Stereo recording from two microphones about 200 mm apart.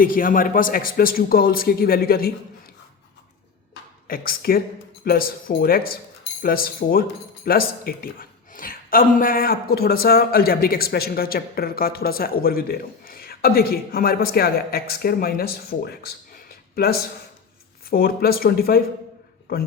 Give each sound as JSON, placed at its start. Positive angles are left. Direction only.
{"t": 0.0, "sound": "speech", "side_deg": 45}
{"t": 4.0, "sound": "speech", "side_deg": 45}